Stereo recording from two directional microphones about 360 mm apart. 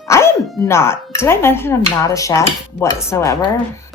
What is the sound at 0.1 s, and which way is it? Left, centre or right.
Speech, centre.